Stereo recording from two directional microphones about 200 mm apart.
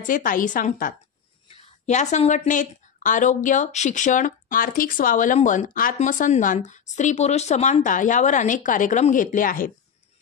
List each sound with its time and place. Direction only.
0.0 s a woman's voice: 45° left (ahead or behind)
1.5 s a woman's voice: 35° left (ahead or behind)